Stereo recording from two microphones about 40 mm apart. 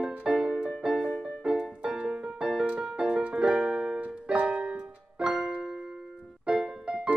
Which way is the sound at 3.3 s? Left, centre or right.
Right.